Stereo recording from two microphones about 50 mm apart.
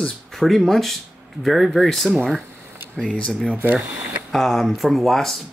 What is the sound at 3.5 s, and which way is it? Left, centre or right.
Speech, right.